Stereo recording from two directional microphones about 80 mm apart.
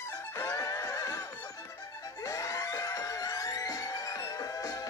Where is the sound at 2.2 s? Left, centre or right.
Left.